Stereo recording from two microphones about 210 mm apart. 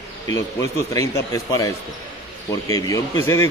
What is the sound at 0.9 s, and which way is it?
Speech, 15° left (ahead or behind).